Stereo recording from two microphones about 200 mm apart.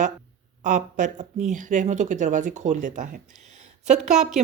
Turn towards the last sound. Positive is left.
turn(degrees=-35)  # may be behind; listen again after turning